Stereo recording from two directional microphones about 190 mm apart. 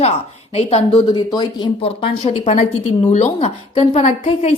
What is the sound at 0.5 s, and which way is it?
A woman's voice, 30° left (ahead or behind).